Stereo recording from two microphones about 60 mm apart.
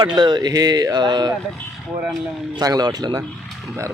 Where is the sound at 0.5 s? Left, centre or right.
Right.